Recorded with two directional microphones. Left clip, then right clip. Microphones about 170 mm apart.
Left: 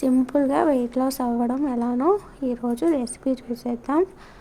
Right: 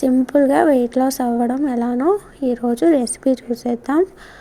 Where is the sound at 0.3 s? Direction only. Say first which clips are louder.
Right 9 dB; 20° right (ahead or behind).